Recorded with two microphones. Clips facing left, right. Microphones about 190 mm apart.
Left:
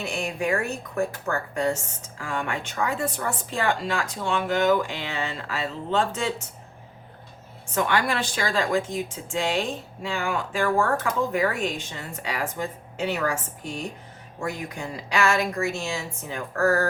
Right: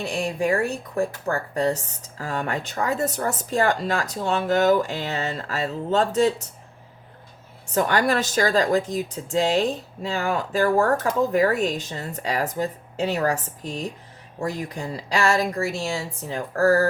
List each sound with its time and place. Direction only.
0.0 s speech: 35° right (ahead or behind)
7.7 s speech: 40° right (ahead or behind)